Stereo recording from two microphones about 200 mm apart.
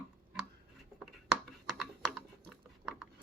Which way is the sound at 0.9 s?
Centre (ahead or behind).